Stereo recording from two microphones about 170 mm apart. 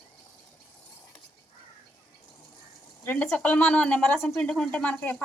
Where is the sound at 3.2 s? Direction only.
10° left (ahead or behind).